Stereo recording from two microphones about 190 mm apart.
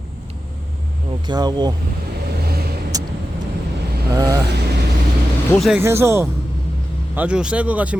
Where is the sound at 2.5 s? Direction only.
55° right (ahead or behind).